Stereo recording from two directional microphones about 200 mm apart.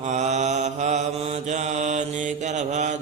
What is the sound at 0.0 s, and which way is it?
Mantra, 35° right (ahead or behind).